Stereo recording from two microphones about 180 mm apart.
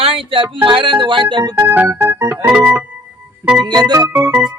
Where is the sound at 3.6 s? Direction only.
20° right (ahead or behind).